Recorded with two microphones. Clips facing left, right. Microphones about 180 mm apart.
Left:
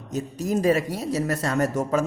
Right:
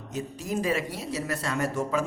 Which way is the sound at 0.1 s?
40° left (ahead or behind).